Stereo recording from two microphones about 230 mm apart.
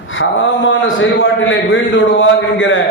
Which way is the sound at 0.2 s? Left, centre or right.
Left.